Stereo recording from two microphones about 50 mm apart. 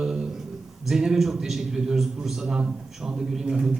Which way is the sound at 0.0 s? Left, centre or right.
Centre.